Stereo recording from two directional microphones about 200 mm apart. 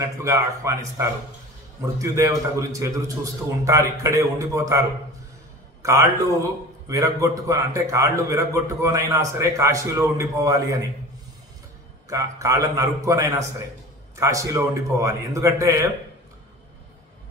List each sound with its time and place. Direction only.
0.0 s a man's voice: 15° right (ahead or behind)
12.1 s a man's voice: 15° right (ahead or behind)